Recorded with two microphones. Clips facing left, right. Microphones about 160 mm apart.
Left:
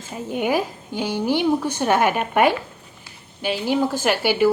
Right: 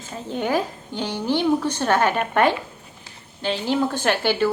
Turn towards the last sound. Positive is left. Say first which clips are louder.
# left 2 dB
turn(degrees=10)  # may be behind; listen again after turning